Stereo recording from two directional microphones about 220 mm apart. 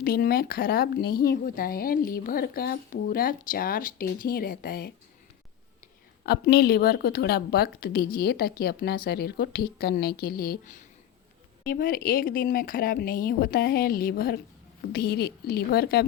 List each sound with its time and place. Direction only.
0.0 s speech: 45° left (ahead or behind)
6.2 s a woman's voice: 45° left (ahead or behind)